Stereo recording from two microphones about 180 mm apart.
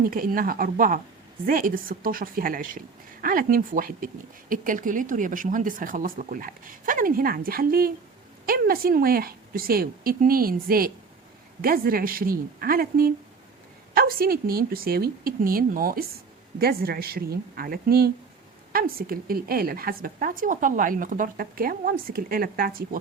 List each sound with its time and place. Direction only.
0.0 s a woman's voice: 50° right (ahead or behind)